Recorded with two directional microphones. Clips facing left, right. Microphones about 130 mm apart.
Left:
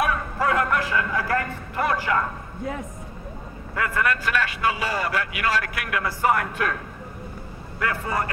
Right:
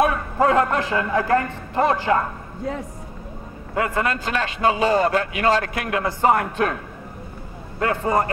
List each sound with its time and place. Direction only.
0.0 s a man's voice: 25° right (ahead or behind)
3.7 s a man's voice: 25° right (ahead or behind)
7.8 s a man's voice: 30° right (ahead or behind)